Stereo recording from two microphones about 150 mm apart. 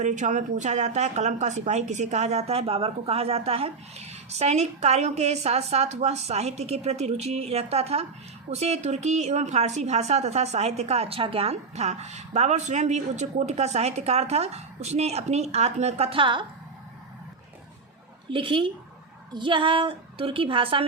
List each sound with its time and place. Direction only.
0.0 s a woman's voice: 55° right (ahead or behind); by 16.5 s 35° right (ahead or behind)
18.3 s a woman's voice: 35° right (ahead or behind)